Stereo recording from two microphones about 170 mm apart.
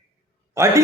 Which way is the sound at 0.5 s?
15° right (ahead or behind).